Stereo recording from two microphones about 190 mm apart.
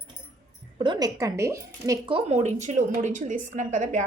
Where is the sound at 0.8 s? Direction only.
20° right (ahead or behind).